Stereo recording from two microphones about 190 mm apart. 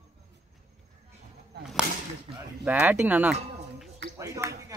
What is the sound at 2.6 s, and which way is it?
Speech, 10° right (ahead or behind).